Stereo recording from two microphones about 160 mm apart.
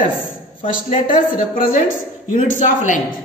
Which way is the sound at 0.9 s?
45° left (ahead or behind).